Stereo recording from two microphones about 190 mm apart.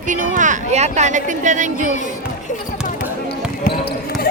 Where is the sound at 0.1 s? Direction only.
40° right (ahead or behind).